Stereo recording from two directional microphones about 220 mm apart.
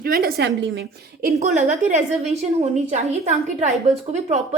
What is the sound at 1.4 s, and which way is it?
A woman's voice, 30° right (ahead or behind).